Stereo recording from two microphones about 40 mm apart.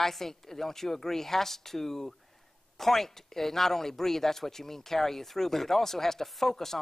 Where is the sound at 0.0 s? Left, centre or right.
Centre.